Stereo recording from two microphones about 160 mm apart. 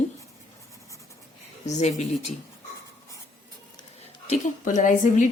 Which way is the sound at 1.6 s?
45° left (ahead or behind).